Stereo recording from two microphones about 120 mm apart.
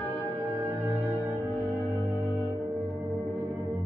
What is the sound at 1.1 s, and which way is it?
Music, 15° right (ahead or behind).